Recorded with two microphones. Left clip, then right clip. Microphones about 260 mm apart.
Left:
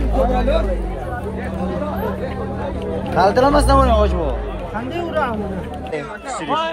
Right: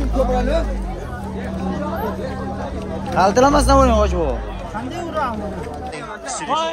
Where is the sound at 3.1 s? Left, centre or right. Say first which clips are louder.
Even; right.